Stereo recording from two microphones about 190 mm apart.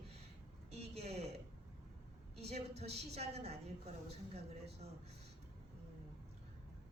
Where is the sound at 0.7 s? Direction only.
35° right (ahead or behind).